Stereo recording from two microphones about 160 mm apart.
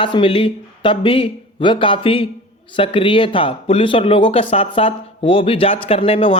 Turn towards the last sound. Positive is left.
turn(degrees=35)  # may be behind; listen again after turning